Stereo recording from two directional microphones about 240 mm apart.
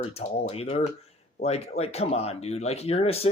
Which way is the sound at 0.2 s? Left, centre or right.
Left.